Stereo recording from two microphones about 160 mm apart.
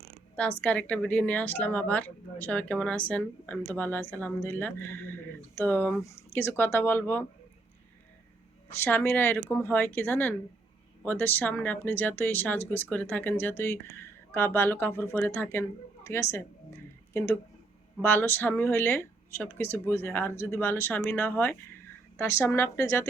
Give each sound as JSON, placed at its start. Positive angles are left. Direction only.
{"t": 0.6, "sound": "speech", "side_deg": 10}
{"t": 8.7, "sound": "speech", "side_deg": 10}
{"t": 18.0, "sound": "speech", "side_deg": 15}